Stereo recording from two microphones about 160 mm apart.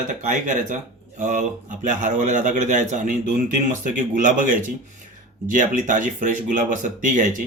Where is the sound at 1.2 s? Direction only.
55° right (ahead or behind).